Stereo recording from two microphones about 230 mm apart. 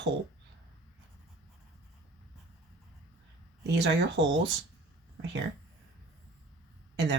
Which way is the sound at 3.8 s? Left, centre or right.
Right.